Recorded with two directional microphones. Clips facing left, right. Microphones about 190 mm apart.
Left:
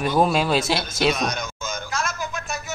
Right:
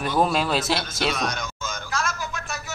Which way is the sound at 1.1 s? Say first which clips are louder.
Left 2 dB; 20° left (ahead or behind).